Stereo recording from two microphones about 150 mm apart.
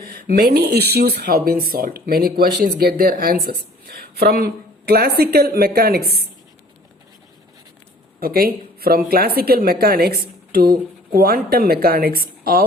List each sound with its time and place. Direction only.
0.1 s a woman's voice: 75° right (ahead or behind)
8.2 s speech: 85° right